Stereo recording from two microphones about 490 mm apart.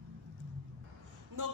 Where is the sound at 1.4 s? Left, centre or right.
Right.